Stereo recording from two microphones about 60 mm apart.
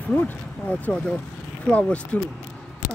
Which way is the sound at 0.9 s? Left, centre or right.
Left.